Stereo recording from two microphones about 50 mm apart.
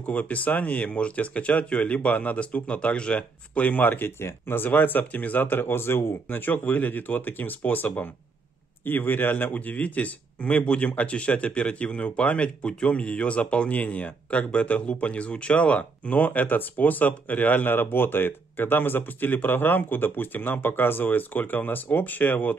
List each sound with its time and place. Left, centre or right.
0.0 s speech: left
4.2 s speech: left